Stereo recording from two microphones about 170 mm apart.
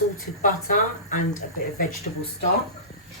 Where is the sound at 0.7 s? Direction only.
50° left (ahead or behind).